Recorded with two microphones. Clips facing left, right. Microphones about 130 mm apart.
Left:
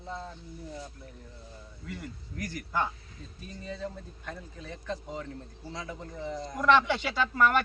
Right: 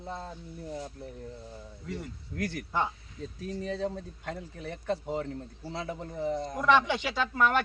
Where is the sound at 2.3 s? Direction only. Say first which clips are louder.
Right 5 dB; 75° right (ahead or behind).